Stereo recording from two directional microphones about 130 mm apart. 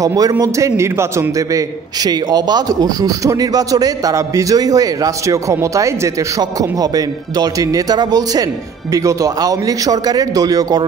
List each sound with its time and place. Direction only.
0.0 s speech: 30° right (ahead or behind)
2.0 s speech: 30° right (ahead or behind)